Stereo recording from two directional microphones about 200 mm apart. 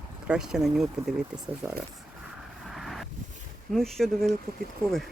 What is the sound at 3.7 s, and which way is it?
Speech, centre (ahead or behind).